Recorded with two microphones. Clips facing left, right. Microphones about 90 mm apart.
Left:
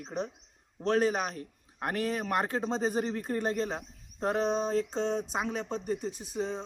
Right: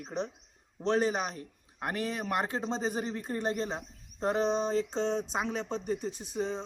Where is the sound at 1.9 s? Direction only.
45° left (ahead or behind).